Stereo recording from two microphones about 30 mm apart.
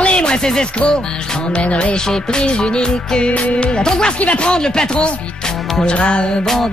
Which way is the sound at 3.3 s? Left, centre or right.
Left.